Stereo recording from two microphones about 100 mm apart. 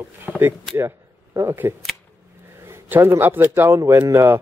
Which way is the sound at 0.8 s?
25° right (ahead or behind).